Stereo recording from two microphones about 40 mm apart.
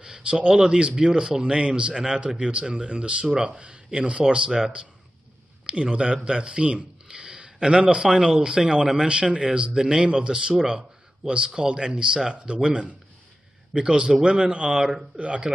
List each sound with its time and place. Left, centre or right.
0.0 s a sound: centre
0.7 s speech: right
5.7 s speech: right
14.7 s speech: centre
15.1 s speech: right